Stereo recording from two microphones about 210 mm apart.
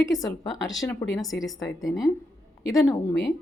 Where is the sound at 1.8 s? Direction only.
15° left (ahead or behind).